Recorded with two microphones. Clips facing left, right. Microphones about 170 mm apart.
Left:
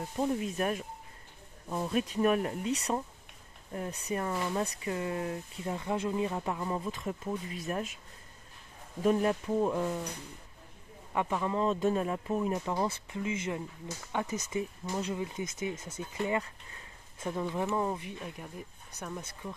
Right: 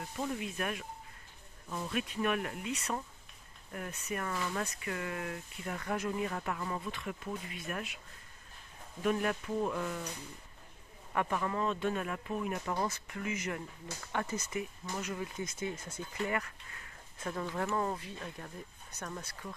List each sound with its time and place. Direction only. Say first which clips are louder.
0.2 s speech: left 6 dB; 40° left (ahead or behind); by 6.9 s 25° left (ahead or behind)
6.9 s speech: left 4 dB; 35° left (ahead or behind)
9.0 s speech: left 5 dB; 30° left (ahead or behind)
11.1 s speech: left 2 dB; 20° left (ahead or behind)
11.6 s speech: left 5 dB; 35° left (ahead or behind); by 14.6 s 20° left (ahead or behind)
14.6 s speech: left 5 dB; 30° left (ahead or behind)
15.1 s speech: left 3 dB; 20° left (ahead or behind)